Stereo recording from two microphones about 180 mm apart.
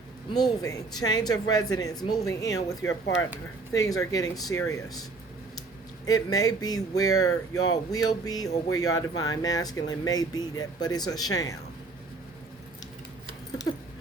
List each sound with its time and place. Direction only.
0.3 s speech: 20° left (ahead or behind)
6.1 s speech: 20° left (ahead or behind)